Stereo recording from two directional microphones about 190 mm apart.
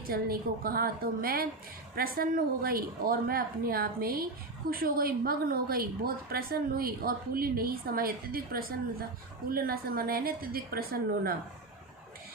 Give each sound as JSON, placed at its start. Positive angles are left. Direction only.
{"t": 0.1, "sound": "a woman's voice", "side_deg": -50}